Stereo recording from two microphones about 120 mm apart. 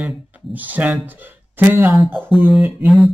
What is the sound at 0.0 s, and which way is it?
Speech, 15° right (ahead or behind).